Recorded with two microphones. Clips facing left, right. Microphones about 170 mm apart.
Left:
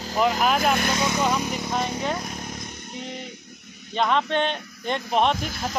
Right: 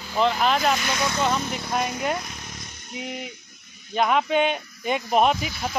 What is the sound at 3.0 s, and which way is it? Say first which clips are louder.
Speech: right 3 dB; 10° right (ahead or behind).